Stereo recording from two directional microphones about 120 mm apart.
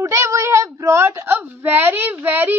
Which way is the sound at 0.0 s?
25° right (ahead or behind).